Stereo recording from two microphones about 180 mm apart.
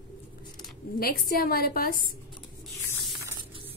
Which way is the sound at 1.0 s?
55° left (ahead or behind).